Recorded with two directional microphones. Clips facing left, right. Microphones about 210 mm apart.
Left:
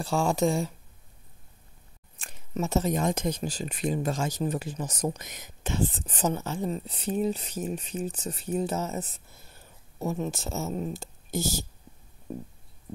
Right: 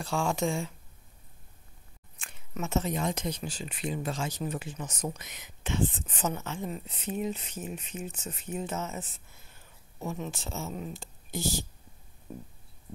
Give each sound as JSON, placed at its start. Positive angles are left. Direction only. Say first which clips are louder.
{"t": 0.0, "sound": "speech", "louder": "left 4 dB", "side_deg": 35}
{"t": 2.1, "sound": "speech", "louder": "left 6 dB", "side_deg": 35}